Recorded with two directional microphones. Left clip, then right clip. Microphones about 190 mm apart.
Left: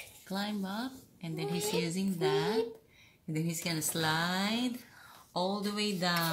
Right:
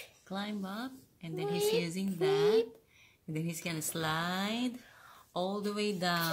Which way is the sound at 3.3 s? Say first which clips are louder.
Left 3 dB; 20° right (ahead or behind).